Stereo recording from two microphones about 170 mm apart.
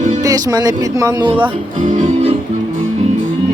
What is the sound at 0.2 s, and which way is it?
Speech, 20° right (ahead or behind).